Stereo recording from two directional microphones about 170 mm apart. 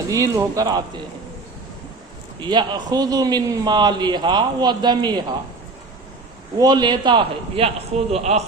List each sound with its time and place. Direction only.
0.1 s a man's voice: 20° right (ahead or behind)
2.4 s a man's voice: 25° right (ahead or behind)
6.6 s a man's voice: 25° right (ahead or behind); by 8.4 s 40° right (ahead or behind)